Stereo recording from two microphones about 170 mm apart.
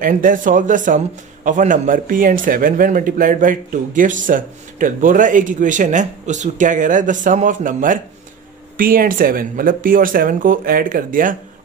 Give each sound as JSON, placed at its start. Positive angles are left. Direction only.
{"t": 0.0, "sound": "speech", "side_deg": -55}